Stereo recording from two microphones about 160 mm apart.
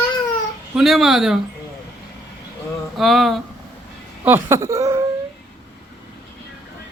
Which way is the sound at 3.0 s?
Centre (ahead or behind).